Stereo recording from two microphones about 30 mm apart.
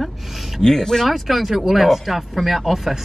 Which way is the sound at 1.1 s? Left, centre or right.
Centre.